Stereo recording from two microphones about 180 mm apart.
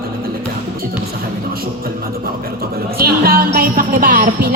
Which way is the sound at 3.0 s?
55° right (ahead or behind).